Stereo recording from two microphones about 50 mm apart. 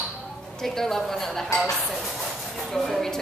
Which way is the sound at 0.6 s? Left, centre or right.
Centre.